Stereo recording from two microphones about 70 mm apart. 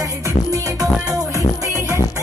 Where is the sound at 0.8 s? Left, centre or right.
Right.